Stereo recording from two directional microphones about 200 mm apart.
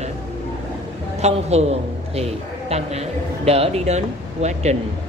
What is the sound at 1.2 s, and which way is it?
A woman's voice, 30° right (ahead or behind).